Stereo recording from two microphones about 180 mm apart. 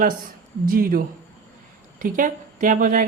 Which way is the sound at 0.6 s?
55° right (ahead or behind).